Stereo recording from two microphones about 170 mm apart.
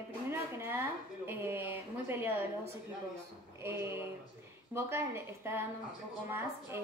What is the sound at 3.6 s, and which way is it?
A woman's voice, 15° right (ahead or behind).